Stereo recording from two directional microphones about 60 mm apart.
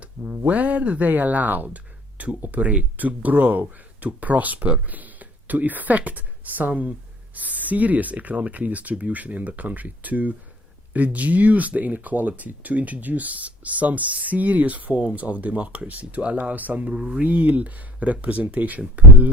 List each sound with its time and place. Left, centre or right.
0.0 s speech: right
17.2 s speech: right